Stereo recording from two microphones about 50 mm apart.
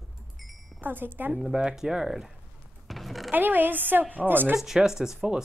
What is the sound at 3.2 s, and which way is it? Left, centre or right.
A woman's voice, right.